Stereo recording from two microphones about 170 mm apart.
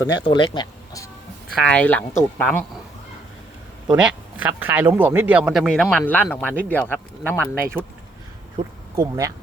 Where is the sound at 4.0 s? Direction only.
10° right (ahead or behind); by 7.5 s 10° left (ahead or behind).